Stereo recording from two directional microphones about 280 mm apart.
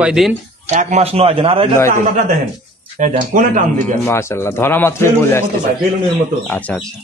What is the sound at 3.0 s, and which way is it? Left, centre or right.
Speech, right.